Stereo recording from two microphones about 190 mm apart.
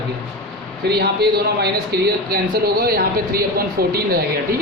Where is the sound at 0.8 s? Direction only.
55° right (ahead or behind).